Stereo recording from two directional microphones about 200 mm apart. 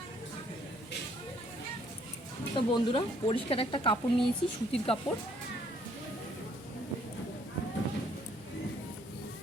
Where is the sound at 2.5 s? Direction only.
25° left (ahead or behind).